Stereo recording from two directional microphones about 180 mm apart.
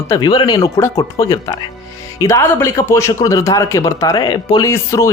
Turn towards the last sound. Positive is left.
turn(degrees=15)  # may be behind; listen again after turning